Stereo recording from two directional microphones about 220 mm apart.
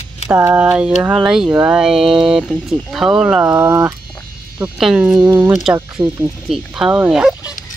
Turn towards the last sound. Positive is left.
turn(degrees=-5)  # may be behind; listen again after turning